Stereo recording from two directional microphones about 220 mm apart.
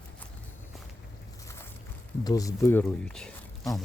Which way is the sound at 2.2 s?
15° left (ahead or behind).